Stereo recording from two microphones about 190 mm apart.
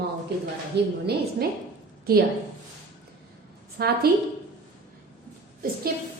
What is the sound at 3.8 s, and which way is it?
Speech, 55° right (ahead or behind).